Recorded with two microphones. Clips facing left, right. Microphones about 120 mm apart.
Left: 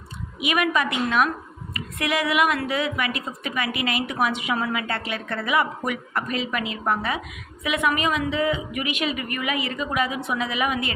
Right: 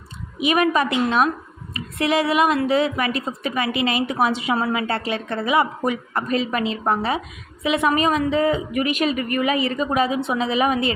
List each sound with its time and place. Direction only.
0.3 s a woman's voice: 30° right (ahead or behind)